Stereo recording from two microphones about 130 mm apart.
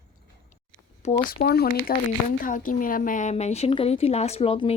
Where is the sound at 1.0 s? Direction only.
60° left (ahead or behind).